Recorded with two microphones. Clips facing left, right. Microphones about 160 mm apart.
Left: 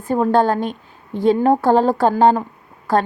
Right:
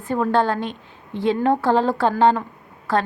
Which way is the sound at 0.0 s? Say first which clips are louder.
Left 4 dB; 40° left (ahead or behind).